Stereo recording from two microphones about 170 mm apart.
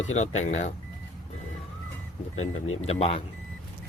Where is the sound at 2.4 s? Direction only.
40° left (ahead or behind).